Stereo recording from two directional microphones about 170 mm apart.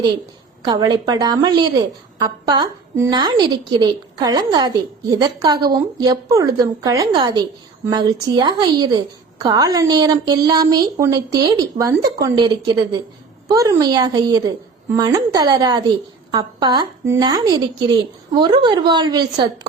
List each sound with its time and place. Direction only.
0.6 s a woman's voice: 25° right (ahead or behind)